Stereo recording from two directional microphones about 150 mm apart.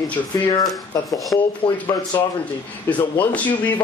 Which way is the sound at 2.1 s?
20° left (ahead or behind).